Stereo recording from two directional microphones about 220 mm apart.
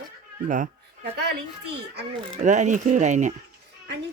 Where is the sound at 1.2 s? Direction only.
50° right (ahead or behind).